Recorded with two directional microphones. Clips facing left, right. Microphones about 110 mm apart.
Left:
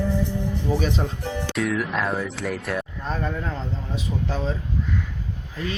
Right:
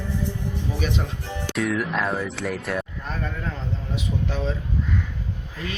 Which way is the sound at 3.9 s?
35° left (ahead or behind).